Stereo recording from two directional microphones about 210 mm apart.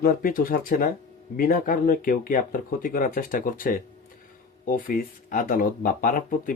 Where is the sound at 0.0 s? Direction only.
45° left (ahead or behind).